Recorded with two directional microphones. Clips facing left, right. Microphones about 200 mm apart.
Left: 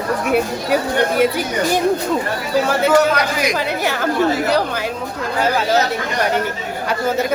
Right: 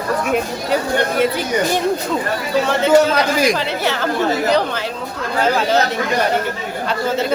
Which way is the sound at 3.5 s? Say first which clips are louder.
Even; 10° left (ahead or behind).